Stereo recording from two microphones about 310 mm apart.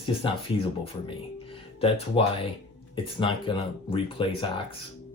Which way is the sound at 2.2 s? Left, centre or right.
Centre.